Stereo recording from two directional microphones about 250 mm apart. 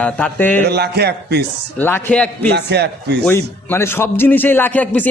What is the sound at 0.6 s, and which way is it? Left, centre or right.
Speech, right.